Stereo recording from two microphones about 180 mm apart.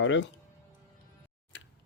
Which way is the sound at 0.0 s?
90° left.